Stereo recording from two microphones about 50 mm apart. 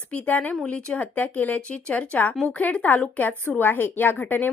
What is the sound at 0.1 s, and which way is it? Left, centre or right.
A woman's voice, left.